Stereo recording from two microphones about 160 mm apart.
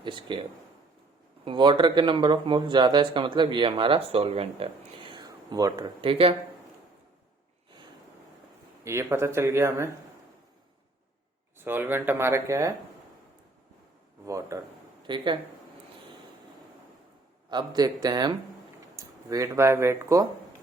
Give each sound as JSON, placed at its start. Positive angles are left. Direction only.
{"t": 0.0, "sound": "speech", "side_deg": -30}
{"t": 1.5, "sound": "speech", "side_deg": -30}
{"t": 6.0, "sound": "speech", "side_deg": -35}
{"t": 8.8, "sound": "speech", "side_deg": -15}
{"t": 11.5, "sound": "speech", "side_deg": -15}
{"t": 14.3, "sound": "speech", "side_deg": -20}
{"t": 17.5, "sound": "speech", "side_deg": -25}